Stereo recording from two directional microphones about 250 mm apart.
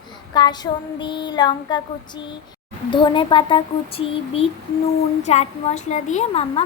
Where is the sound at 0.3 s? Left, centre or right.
Centre.